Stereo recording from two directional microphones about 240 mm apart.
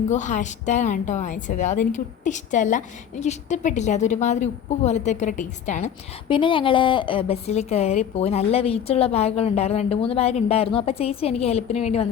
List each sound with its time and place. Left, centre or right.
0.1 s a woman's voice: left